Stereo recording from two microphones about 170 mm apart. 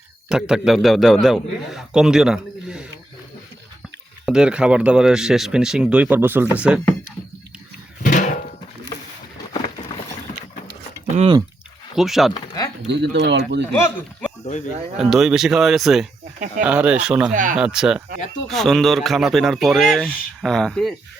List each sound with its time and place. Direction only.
0.3 s a man's voice: 5° right (ahead or behind)
4.3 s a man's voice: 5° right (ahead or behind)
8.0 s a sound: 45° left (ahead or behind)
11.9 s a man's voice: centre (ahead or behind)
12.3 s speech: 20° left (ahead or behind)
12.9 s speech: 90° right
13.8 s speech: 10° left (ahead or behind)
14.9 s a man's voice: centre (ahead or behind)
17.3 s speech: 50° right (ahead or behind)
17.6 s a man's voice: 5° right (ahead or behind)